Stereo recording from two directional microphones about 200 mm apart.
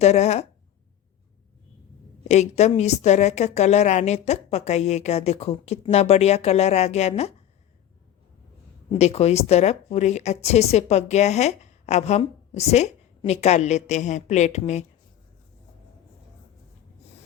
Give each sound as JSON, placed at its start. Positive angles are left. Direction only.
{"t": 0.0, "sound": "speech", "side_deg": 35}
{"t": 2.2, "sound": "speech", "side_deg": 35}
{"t": 8.9, "sound": "speech", "side_deg": 35}